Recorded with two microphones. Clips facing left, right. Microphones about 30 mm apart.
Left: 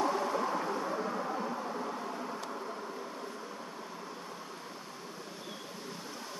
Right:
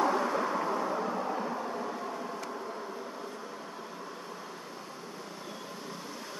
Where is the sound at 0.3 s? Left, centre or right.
Centre.